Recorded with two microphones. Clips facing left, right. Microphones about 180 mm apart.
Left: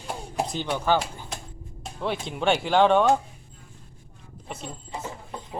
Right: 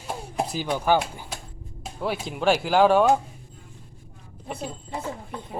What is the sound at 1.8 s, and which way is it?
Speech, 5° right (ahead or behind).